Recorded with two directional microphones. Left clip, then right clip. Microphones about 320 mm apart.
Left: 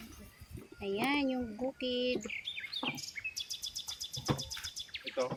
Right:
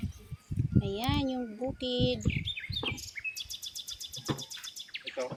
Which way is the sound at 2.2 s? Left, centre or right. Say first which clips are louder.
Right 4 dB; centre.